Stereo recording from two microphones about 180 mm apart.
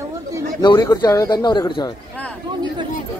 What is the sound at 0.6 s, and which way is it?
Speech, 20° left (ahead or behind).